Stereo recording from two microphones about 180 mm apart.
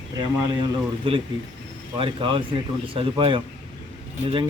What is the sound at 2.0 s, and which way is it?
Speech, 30° right (ahead or behind).